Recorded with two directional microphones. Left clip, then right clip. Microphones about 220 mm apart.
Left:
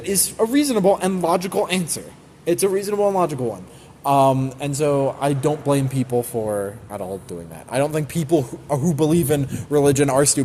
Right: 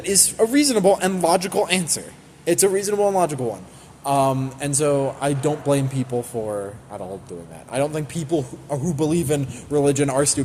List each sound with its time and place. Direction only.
0.0 s speech: 5° left (ahead or behind)
4.0 s speech: 25° left (ahead or behind)